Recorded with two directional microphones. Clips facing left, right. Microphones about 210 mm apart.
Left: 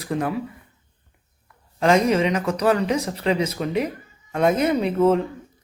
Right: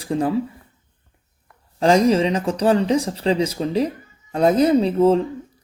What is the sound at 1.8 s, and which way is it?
Speech, 30° right (ahead or behind).